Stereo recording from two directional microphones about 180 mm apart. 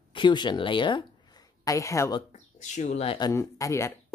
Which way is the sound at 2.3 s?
40° left (ahead or behind).